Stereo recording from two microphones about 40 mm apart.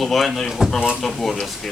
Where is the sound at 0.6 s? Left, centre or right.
Centre.